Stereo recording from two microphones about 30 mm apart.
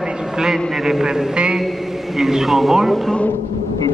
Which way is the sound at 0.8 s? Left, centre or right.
Centre.